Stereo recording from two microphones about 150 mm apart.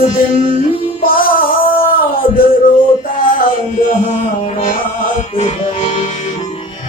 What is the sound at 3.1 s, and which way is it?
Music, 70° left (ahead or behind).